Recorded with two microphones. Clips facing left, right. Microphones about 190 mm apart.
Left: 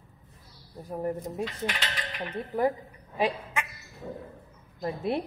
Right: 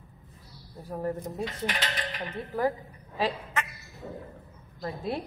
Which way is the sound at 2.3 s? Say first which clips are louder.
Left 2 dB; 15° left (ahead or behind).